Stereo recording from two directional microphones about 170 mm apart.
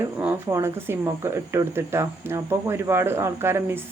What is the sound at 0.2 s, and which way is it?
Speech, 15° right (ahead or behind).